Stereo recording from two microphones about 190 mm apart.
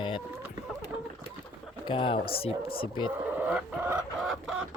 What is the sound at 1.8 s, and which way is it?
Speech, 25° left (ahead or behind).